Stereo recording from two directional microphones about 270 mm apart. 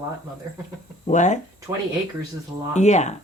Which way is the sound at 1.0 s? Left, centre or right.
Left.